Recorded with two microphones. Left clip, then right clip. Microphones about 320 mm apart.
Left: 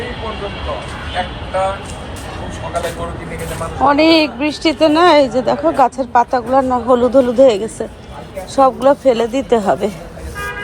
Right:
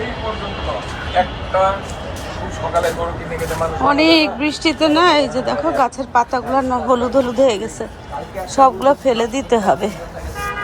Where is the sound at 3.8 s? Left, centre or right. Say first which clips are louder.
Left 3 dB; centre.